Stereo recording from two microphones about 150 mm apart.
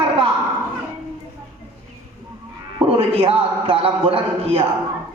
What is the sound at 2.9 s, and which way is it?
Speech, 40° right (ahead or behind).